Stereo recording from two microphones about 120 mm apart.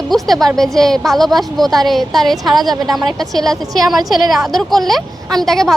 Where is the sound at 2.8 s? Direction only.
35° right (ahead or behind).